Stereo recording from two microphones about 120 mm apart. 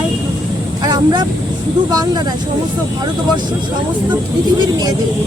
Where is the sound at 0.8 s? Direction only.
35° right (ahead or behind).